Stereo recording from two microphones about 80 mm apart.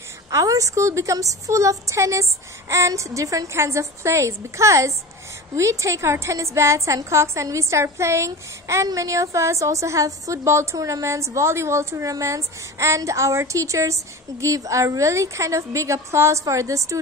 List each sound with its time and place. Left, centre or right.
0.3 s a child's voice: right